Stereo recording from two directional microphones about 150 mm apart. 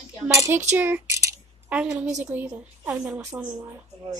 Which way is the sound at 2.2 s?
10° right (ahead or behind).